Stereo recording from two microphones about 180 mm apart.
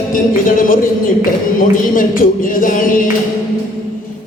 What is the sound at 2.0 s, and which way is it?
Speech, 50° left (ahead or behind).